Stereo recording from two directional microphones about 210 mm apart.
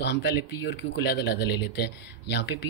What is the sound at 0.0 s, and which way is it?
Speech, 50° left (ahead or behind).